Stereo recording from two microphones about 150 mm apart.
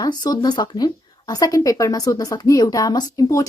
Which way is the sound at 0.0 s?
25° left (ahead or behind).